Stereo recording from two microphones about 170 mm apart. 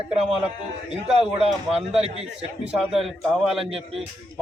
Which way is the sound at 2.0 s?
40° right (ahead or behind).